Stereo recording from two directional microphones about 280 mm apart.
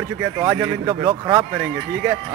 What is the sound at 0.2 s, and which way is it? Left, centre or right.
Speech, centre.